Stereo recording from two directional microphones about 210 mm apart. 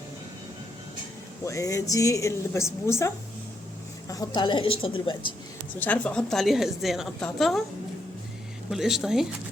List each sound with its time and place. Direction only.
1.5 s a woman's voice: 15° left (ahead or behind)
4.1 s a woman's voice: 20° left (ahead or behind)
5.8 s a woman's voice: 5° left (ahead or behind)
8.7 s a woman's voice: centre (ahead or behind)